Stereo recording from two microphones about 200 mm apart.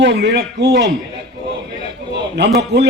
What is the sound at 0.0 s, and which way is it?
Speech, 60° right (ahead or behind).